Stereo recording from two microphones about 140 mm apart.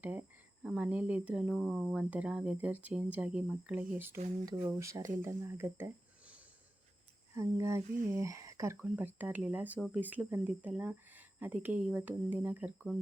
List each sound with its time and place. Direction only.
0.0 s speech: 10° right (ahead or behind)